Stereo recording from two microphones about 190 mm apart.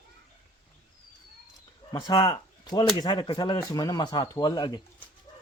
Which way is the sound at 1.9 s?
20° left (ahead or behind).